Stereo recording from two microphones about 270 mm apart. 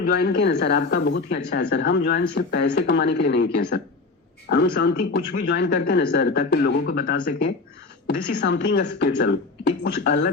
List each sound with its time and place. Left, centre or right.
0.0 s speech: left